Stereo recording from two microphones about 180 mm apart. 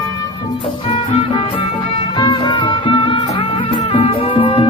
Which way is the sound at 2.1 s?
25° left (ahead or behind).